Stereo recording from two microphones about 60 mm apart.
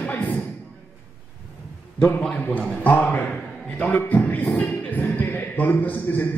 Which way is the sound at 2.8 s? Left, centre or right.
Left.